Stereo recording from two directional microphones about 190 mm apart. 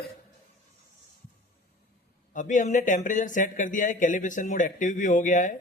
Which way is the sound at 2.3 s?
40° left (ahead or behind).